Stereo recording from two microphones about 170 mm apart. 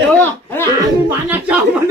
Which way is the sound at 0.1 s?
10° left (ahead or behind).